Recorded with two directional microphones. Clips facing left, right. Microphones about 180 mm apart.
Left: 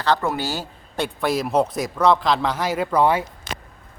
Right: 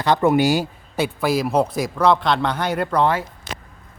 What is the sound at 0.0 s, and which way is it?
Speech, 20° right (ahead or behind).